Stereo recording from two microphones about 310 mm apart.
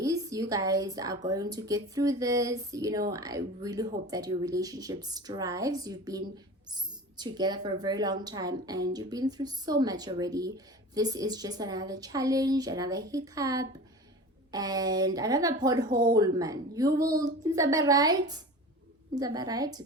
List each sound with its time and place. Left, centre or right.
0.0 s a woman's voice: centre
15.9 s speech: right
16.1 s speech: centre